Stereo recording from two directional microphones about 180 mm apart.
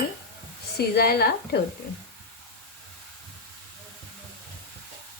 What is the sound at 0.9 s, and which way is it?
Speech, 60° left (ahead or behind).